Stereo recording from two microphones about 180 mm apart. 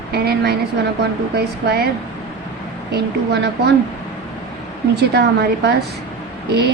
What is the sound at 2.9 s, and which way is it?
Speech, 70° right (ahead or behind).